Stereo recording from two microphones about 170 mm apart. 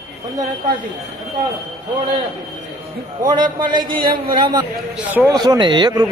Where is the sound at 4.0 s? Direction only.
30° right (ahead or behind).